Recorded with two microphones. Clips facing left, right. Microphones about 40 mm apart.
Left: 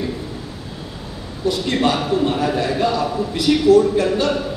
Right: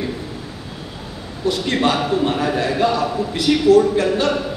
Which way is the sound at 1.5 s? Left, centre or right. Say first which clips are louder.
Even; right.